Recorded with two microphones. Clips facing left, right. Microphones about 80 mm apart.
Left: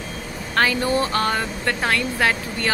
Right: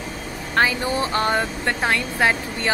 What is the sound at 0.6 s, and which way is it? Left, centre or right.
Speech, centre.